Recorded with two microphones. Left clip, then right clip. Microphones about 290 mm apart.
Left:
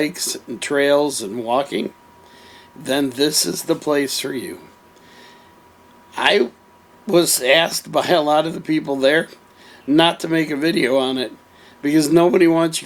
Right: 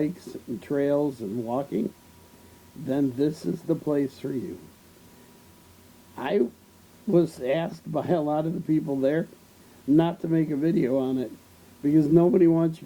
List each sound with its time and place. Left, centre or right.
0.0 s speech: centre
1.0 s speech: left
2.8 s speech: centre
6.1 s speech: centre